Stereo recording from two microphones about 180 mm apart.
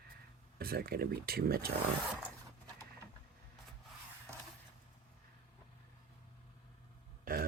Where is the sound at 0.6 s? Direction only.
60° right (ahead or behind).